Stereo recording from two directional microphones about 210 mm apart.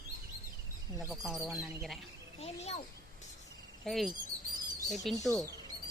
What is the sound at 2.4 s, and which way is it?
Speech, 30° left (ahead or behind).